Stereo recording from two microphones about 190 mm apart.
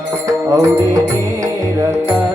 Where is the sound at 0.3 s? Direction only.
15° right (ahead or behind).